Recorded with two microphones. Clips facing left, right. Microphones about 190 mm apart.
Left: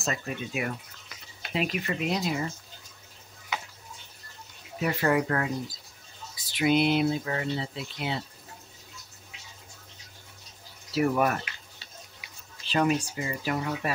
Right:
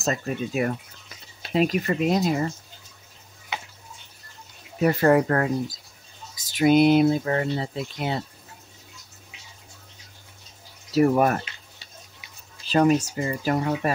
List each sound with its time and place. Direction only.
0.0 s speech: 40° right (ahead or behind)
4.7 s speech: 45° right (ahead or behind)
10.9 s speech: 40° right (ahead or behind)
12.6 s speech: 40° right (ahead or behind)